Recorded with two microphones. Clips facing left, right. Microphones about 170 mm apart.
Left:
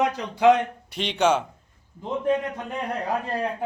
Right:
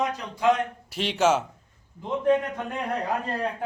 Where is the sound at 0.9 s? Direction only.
5° right (ahead or behind).